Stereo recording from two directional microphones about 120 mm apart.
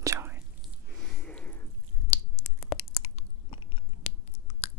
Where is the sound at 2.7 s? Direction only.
55° left (ahead or behind).